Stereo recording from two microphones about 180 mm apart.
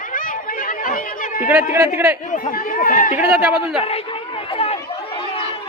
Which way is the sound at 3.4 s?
5° right (ahead or behind).